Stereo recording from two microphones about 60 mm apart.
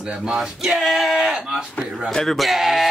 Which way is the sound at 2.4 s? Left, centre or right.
Centre.